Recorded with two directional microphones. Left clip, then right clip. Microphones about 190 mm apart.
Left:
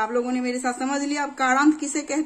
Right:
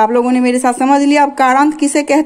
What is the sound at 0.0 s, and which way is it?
A woman's voice, 40° right (ahead or behind).